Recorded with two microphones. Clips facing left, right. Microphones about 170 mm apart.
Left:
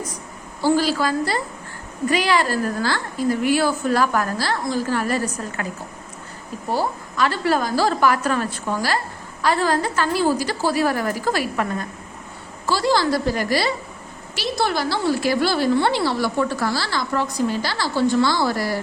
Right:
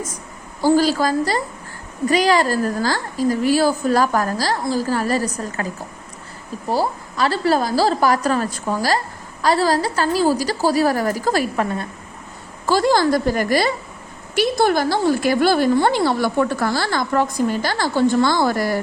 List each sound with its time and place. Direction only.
0.6 s a woman's voice: 40° right (ahead or behind)
6.7 s a woman's voice: 35° right (ahead or behind)
12.6 s a woman's voice: 50° right (ahead or behind)